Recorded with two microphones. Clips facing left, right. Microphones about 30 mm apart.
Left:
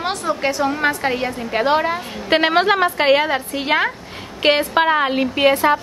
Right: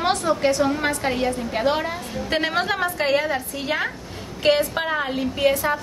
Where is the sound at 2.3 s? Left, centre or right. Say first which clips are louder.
Left 8 dB; left.